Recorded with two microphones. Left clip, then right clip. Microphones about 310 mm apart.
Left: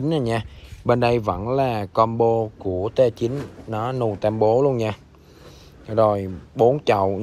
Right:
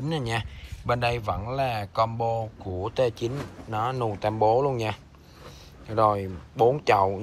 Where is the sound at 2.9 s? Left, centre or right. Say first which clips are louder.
Left 6 dB; centre.